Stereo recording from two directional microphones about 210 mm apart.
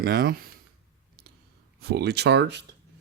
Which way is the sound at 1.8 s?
50° right (ahead or behind).